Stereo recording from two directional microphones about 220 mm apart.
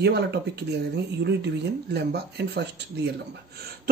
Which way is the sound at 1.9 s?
45° right (ahead or behind).